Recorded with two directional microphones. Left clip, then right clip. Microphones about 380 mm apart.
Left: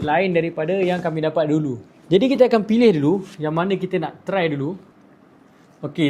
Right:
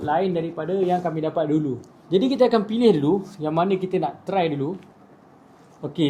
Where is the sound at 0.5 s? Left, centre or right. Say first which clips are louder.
Left 2 dB; centre.